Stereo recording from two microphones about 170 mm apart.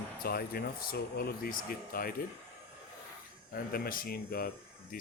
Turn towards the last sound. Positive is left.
turn(degrees=60)  # may be behind; listen again after turning